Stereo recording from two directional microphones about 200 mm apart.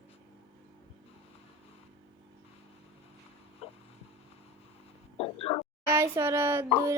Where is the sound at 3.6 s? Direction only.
30° left (ahead or behind).